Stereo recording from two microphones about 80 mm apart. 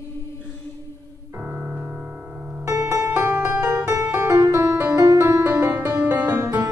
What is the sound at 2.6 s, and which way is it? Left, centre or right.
Music, right.